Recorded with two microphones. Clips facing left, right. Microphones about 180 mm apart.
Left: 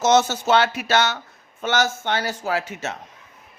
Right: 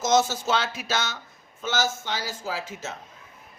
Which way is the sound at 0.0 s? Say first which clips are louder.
Left 4 dB; 70° left (ahead or behind).